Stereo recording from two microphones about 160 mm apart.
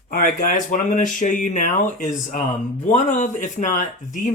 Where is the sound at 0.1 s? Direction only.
60° left (ahead or behind).